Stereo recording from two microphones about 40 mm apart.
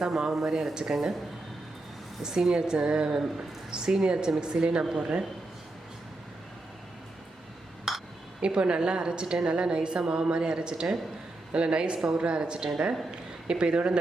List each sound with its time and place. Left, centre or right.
0.0 s speech: centre
2.2 s a woman's voice: centre
4.8 s speech: centre
7.9 s a sound: centre
8.4 s a woman's voice: right